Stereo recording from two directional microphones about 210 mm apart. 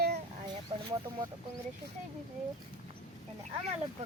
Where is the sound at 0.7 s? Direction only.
25° right (ahead or behind).